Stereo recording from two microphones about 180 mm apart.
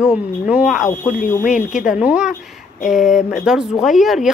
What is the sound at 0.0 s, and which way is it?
A woman's voice, 5° right (ahead or behind).